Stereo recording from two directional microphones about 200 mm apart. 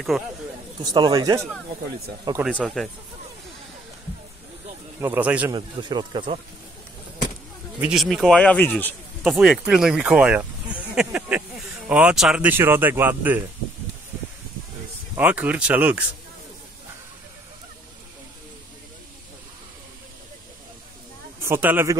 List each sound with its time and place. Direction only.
0.1 s speech: centre (ahead or behind)
0.7 s speech: 20° right (ahead or behind)
2.6 s speech: centre (ahead or behind)
5.0 s speech: 10° right (ahead or behind)
5.5 s speech: 25° right (ahead or behind)
7.8 s speech: centre (ahead or behind)
9.2 s speech: 5° right (ahead or behind)
15.1 s speech: 10° right (ahead or behind)
21.4 s speech: 10° right (ahead or behind)